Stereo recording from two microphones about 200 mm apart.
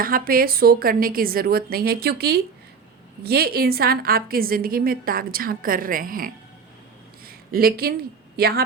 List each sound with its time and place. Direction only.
0.0 s a woman's voice: 45° right (ahead or behind)